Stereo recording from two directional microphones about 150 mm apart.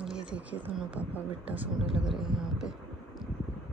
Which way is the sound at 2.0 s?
5° right (ahead or behind).